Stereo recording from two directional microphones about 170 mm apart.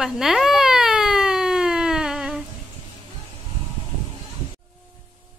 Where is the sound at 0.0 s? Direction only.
Centre (ahead or behind).